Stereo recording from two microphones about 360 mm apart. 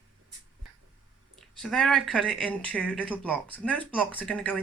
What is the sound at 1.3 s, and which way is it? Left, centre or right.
Speech, centre.